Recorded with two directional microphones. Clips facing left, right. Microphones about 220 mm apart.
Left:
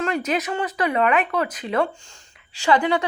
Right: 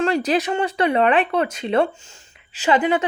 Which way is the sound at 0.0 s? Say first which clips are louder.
Right 4 dB; 30° right (ahead or behind).